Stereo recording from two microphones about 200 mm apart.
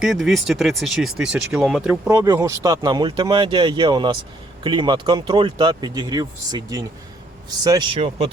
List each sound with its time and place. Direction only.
0.0 s speech: centre (ahead or behind)
2.0 s speech: 15° right (ahead or behind)